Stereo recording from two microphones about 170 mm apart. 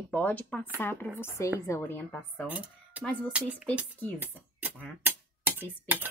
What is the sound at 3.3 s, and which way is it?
Dishes, 5° right (ahead or behind).